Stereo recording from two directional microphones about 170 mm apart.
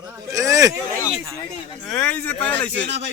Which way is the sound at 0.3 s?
20° right (ahead or behind).